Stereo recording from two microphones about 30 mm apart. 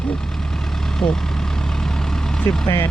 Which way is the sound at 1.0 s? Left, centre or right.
Left.